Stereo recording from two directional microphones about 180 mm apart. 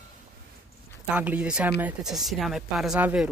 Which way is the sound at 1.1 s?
5° right (ahead or behind).